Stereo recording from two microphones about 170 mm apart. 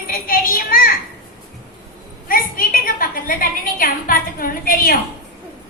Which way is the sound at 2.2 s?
55° left (ahead or behind).